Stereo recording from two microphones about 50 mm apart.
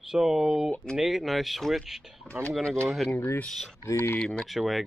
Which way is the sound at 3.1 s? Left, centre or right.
Left.